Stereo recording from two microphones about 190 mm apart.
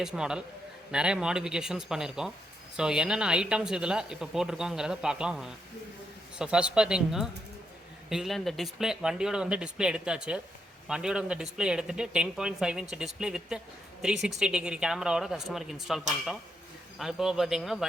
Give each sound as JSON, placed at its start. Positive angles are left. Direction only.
{"t": 0.0, "sound": "speech", "side_deg": -5}
{"t": 17.0, "sound": "speech", "side_deg": 0}